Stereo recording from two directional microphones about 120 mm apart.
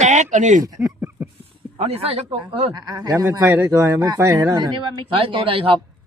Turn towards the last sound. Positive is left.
turn(degrees=-45)  # may be behind; listen again after turning